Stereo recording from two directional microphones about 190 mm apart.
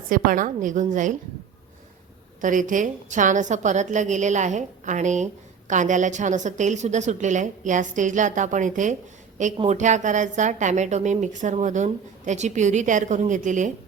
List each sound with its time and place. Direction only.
0.1 s a woman's voice: 45° right (ahead or behind)
2.4 s a woman's voice: 45° right (ahead or behind)